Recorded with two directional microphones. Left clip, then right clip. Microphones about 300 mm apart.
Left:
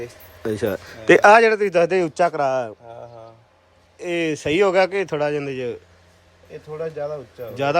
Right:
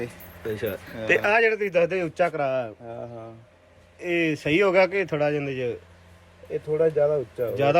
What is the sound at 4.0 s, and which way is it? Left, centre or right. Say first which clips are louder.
Speech: left 1 dB; centre.